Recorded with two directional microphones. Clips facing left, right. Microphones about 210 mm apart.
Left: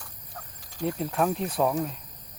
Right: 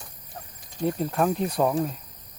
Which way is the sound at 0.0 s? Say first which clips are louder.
Right 2 dB; 20° right (ahead or behind).